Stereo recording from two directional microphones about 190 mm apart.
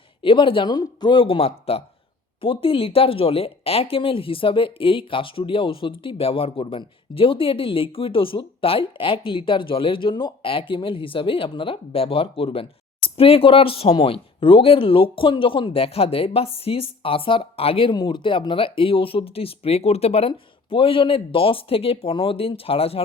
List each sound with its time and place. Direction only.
0.2 s speech: 25° left (ahead or behind)